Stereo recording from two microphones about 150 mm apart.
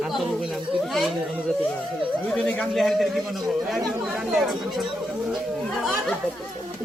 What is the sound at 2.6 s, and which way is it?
Speech, centre (ahead or behind).